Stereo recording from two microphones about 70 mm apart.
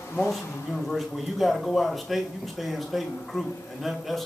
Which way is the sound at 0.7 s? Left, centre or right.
Centre.